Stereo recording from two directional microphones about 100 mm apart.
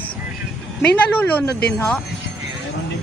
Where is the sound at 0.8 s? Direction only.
20° left (ahead or behind).